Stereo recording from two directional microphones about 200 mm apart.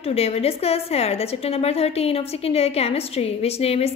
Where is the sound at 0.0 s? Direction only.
30° left (ahead or behind).